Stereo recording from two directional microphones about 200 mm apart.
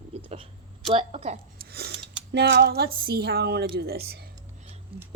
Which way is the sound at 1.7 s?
50° right (ahead or behind).